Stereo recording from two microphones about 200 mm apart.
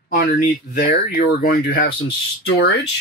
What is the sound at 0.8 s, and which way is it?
Speech, 50° left (ahead or behind).